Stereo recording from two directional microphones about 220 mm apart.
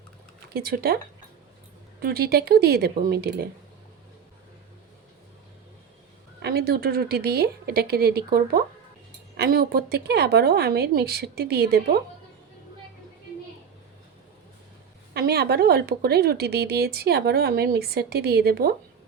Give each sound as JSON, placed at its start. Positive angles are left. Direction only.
{"t": 0.5, "sound": "speech", "side_deg": -45}
{"t": 2.0, "sound": "speech", "side_deg": -45}
{"t": 6.4, "sound": "speech", "side_deg": -45}
{"t": 15.1, "sound": "speech", "side_deg": -45}